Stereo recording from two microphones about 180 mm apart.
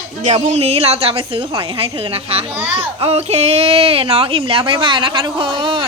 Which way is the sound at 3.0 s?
35° right (ahead or behind).